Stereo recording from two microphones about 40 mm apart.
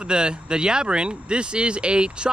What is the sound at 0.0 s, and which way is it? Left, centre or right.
Speech, right.